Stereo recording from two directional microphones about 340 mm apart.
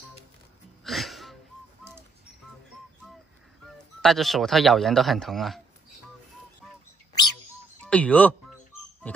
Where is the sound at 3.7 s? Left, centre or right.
Centre.